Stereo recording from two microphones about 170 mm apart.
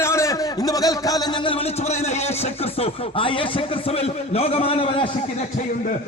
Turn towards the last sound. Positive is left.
turn(degrees=35)  # may be behind; listen again after turning